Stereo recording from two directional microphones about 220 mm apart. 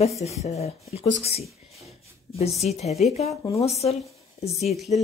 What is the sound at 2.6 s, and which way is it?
Speech, 30° left (ahead or behind).